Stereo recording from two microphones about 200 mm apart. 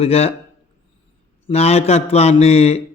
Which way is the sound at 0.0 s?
30° left (ahead or behind).